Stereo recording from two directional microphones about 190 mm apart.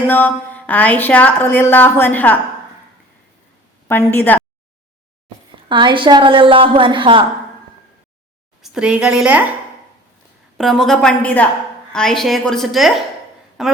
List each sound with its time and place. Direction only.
0.1 s a woman's voice: 10° left (ahead or behind)
3.8 s a woman's voice: 10° left (ahead or behind)
5.6 s a woman's voice: 25° right (ahead or behind)
8.6 s a woman's voice: 5° right (ahead or behind)
10.6 s a woman's voice: centre (ahead or behind)